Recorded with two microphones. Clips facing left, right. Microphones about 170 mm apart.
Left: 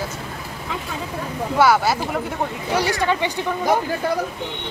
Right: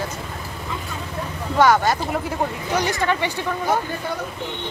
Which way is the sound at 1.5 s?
10° left (ahead or behind).